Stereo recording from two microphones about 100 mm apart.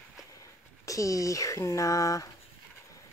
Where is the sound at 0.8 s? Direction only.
35° left (ahead or behind).